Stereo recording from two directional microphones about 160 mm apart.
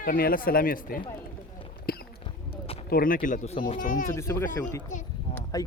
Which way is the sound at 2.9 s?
60° left (ahead or behind).